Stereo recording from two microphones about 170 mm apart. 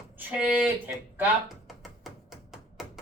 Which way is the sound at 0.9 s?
10° right (ahead or behind).